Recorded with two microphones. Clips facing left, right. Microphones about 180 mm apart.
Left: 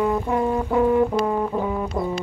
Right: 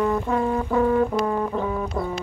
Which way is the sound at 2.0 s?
15° left (ahead or behind).